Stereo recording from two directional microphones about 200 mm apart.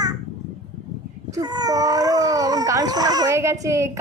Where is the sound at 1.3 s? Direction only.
20° right (ahead or behind).